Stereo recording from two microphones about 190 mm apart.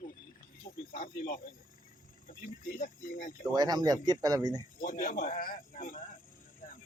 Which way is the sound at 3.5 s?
20° right (ahead or behind).